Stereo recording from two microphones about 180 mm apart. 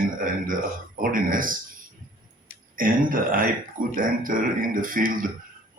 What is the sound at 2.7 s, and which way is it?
Speech, 50° right (ahead or behind).